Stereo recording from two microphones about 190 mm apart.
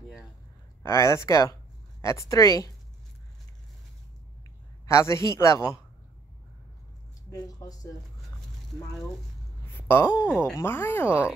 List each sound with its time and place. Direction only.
0.8 s speech: 15° left (ahead or behind)
4.8 s speech: 15° left (ahead or behind)
7.2 s speech: 20° left (ahead or behind)
9.8 s a sound: 10° left (ahead or behind)
10.5 s speech: 10° left (ahead or behind)
11.1 s speech: 10° right (ahead or behind)